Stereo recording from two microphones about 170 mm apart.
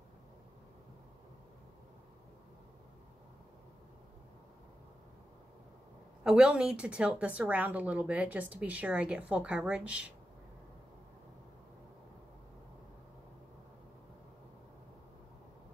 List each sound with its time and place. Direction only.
6.2 s speech: 5° right (ahead or behind)